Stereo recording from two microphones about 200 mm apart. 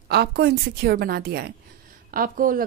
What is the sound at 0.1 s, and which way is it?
A woman's voice, 55° right (ahead or behind).